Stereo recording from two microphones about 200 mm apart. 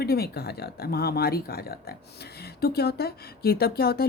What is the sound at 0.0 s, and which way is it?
Speech, 50° left (ahead or behind).